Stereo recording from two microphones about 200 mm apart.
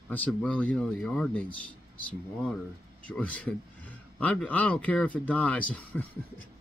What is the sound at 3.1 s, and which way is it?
Speech, 5° left (ahead or behind).